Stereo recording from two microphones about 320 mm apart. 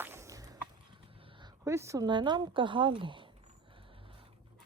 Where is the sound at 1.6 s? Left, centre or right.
Centre.